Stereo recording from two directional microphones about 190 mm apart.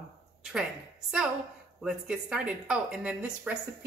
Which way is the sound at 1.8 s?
5° right (ahead or behind).